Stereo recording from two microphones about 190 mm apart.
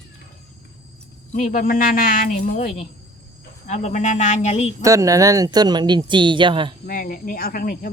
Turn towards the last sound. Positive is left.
turn(degrees=50)  # may be behind; listen again after turning